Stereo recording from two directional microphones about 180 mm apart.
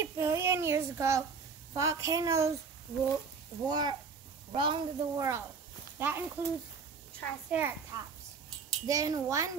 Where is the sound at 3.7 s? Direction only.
25° right (ahead or behind).